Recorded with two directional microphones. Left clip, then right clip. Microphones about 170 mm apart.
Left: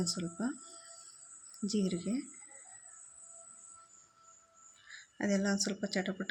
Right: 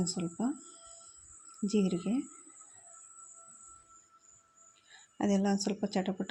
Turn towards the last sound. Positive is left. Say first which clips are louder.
# right 2 dB
turn(degrees=-20)  # may be behind; listen again after turning